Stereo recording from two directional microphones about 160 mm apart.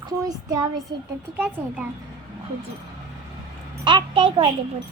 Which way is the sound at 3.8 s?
35° right (ahead or behind).